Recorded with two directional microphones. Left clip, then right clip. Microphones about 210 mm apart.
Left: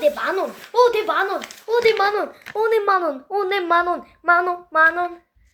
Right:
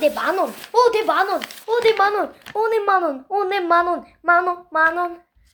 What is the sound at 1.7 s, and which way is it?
A child's voice, 20° right (ahead or behind).